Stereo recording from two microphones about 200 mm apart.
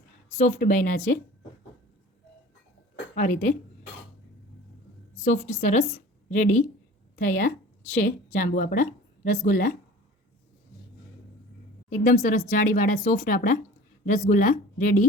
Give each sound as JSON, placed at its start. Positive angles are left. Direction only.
{"t": 0.3, "sound": "speech", "side_deg": 40}
{"t": 2.9, "sound": "a sound", "side_deg": 40}
{"t": 5.2, "sound": "a woman's voice", "side_deg": 35}
{"t": 12.0, "sound": "a woman's voice", "side_deg": 40}